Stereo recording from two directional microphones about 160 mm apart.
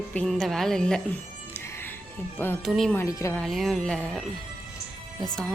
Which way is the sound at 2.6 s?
Centre (ahead or behind).